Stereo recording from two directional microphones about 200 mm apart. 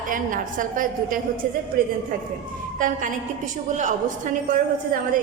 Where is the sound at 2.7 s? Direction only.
40° right (ahead or behind).